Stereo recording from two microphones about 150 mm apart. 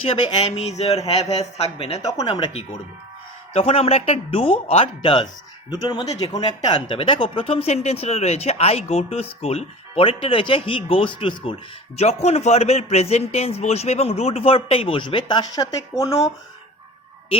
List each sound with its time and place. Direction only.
0.0 s speech: 35° left (ahead or behind)
0.5 s speech: 45° left (ahead or behind)
2.0 s speech: 20° left (ahead or behind)
3.5 s speech: 40° left (ahead or behind); by 6.4 s 25° left (ahead or behind)
6.7 s speech: 35° left (ahead or behind)
11.9 s speech: 45° left (ahead or behind); by 16.1 s 25° left (ahead or behind)